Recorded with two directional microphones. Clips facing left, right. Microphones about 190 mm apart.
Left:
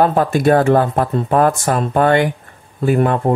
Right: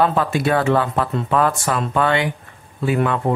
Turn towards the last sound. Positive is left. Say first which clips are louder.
# left 4 dB
turn(degrees=45)  # may be behind; listen again after turning